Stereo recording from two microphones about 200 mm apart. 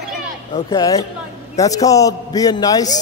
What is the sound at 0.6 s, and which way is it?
A man's voice, 15° left (ahead or behind).